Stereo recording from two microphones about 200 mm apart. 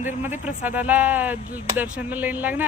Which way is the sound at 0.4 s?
10° right (ahead or behind).